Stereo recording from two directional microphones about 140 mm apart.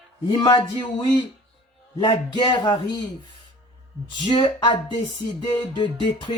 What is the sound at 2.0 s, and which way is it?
A man's voice, 30° left (ahead or behind).